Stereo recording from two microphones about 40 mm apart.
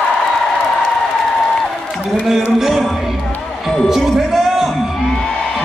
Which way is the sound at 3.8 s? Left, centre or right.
Centre.